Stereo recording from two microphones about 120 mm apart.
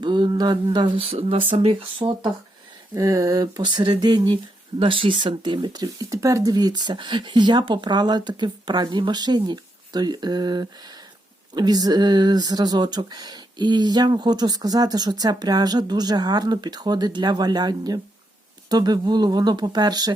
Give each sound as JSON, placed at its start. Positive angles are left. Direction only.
{"t": 0.0, "sound": "speech", "side_deg": -40}
{"t": 2.9, "sound": "speech", "side_deg": -30}